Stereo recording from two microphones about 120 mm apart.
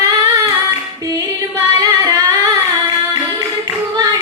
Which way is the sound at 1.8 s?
30° right (ahead or behind).